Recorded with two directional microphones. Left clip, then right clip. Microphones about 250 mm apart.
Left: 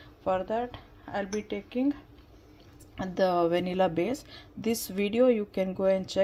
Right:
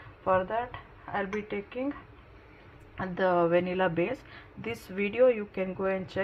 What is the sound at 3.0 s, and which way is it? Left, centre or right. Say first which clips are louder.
A woman's voice: even; left.